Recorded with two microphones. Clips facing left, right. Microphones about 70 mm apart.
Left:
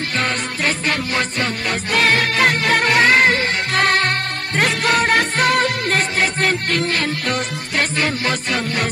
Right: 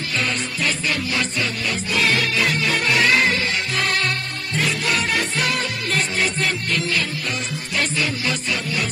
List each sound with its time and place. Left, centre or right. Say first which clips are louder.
0.2 s music: left 3 dB; left